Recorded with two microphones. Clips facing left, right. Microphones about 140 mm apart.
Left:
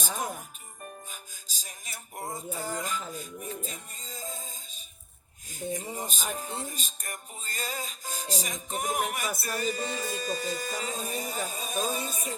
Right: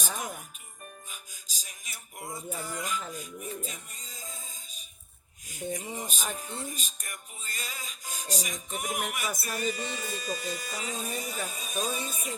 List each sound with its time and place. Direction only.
1.1 s music: 40° left (ahead or behind)
5.5 s speech: 30° left (ahead or behind)
5.9 s music: 40° left (ahead or behind)